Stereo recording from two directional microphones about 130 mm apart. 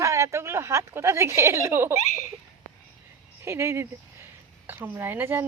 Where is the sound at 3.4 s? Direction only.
20° right (ahead or behind).